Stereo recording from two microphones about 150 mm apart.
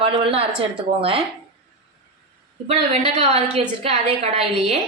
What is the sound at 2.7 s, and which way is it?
A woman's voice, 40° right (ahead or behind).